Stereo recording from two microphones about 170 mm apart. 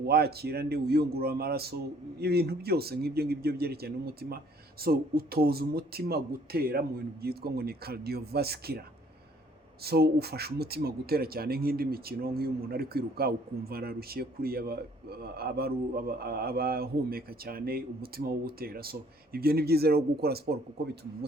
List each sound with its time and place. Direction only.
0.0 s a man's voice: 65° right (ahead or behind)
9.8 s a man's voice: 65° right (ahead or behind)